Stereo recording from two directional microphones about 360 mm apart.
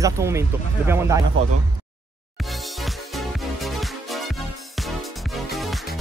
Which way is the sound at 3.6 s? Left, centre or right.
Centre.